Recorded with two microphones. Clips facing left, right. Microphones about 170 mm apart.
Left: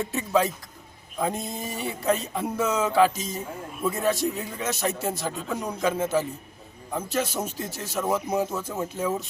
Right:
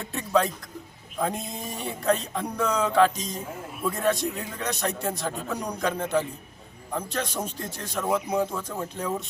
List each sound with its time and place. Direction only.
0.0 s speech: 5° left (ahead or behind)